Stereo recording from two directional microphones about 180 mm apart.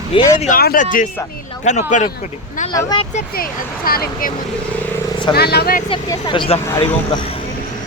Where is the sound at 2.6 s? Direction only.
20° left (ahead or behind).